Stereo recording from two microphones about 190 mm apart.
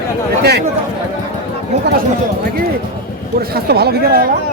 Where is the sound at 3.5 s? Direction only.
55° right (ahead or behind).